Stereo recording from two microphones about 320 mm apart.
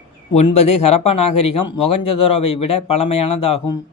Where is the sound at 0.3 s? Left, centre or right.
Centre.